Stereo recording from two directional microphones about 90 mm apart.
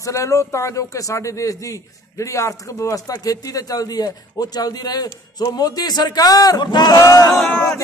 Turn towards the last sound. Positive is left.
turn(degrees=25)  # may be behind; listen again after turning